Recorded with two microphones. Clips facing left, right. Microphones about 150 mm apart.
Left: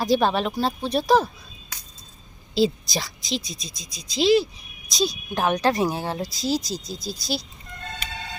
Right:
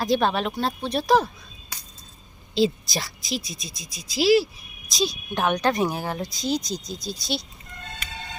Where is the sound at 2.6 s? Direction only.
Centre (ahead or behind).